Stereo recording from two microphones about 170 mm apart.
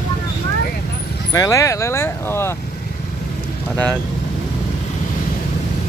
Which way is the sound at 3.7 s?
10° left (ahead or behind).